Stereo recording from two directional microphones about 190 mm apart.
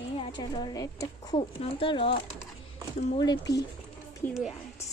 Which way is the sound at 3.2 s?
20° left (ahead or behind).